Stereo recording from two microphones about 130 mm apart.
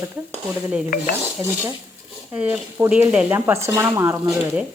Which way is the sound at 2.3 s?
10° right (ahead or behind).